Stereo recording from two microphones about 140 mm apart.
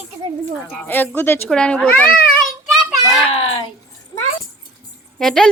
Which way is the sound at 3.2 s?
45° left (ahead or behind).